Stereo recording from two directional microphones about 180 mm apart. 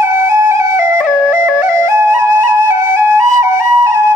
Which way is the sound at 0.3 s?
15° right (ahead or behind).